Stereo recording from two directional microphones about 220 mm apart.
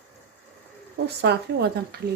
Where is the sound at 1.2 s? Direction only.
50° right (ahead or behind).